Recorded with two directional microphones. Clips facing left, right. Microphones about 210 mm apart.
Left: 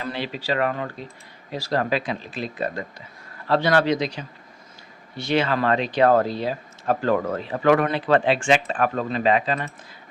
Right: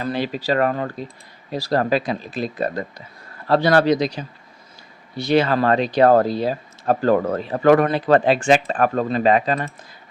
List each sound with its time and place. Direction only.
0.0 s speech: 45° right (ahead or behind)